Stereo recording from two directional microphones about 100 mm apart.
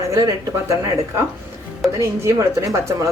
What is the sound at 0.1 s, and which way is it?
Speech, 30° right (ahead or behind).